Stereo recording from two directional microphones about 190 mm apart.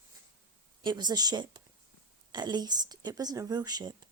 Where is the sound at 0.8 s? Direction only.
20° right (ahead or behind).